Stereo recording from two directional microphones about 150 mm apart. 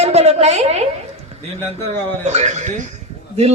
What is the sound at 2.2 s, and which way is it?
Speech, 50° right (ahead or behind).